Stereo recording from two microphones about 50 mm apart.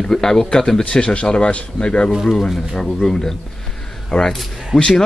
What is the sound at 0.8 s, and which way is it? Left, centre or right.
Speech, left.